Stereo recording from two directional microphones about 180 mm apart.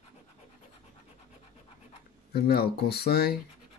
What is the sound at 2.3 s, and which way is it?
Speech, 60° left (ahead or behind).